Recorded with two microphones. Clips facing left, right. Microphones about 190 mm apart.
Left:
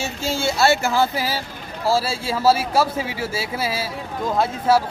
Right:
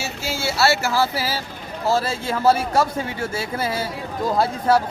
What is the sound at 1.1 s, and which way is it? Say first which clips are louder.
Speech: left 1 dB; 15° left (ahead or behind).